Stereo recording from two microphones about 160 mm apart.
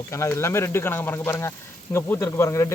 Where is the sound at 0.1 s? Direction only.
15° left (ahead or behind).